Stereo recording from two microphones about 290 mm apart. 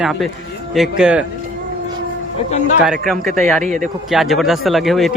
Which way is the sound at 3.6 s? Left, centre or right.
Right.